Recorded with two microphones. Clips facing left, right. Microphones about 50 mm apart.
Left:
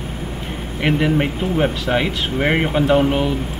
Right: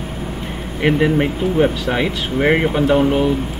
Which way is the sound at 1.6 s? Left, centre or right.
Centre.